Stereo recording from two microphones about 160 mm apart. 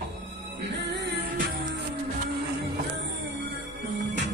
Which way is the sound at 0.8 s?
90° right.